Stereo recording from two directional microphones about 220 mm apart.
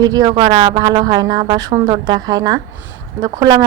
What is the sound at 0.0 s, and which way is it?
Speech, 15° right (ahead or behind).